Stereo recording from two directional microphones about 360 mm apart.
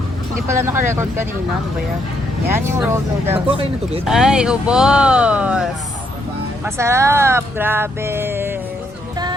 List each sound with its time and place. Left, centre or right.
0.4 s speech: centre
2.5 s speech: centre
6.7 s speech: centre